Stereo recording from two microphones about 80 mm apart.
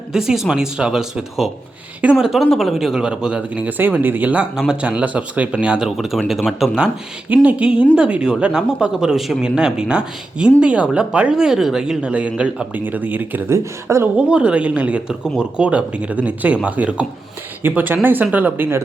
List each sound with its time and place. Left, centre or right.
0.1 s speech: centre
6.0 s speech: centre
7.3 s speech: centre
13.5 s speech: right
14.2 s speech: centre